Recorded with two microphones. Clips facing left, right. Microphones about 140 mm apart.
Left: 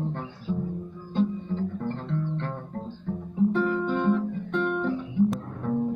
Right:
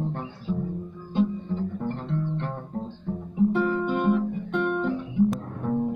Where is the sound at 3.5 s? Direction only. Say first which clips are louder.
Even; 15° right (ahead or behind).